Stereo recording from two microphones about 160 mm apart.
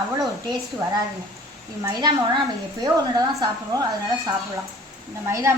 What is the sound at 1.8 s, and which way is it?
A woman's voice, 25° right (ahead or behind).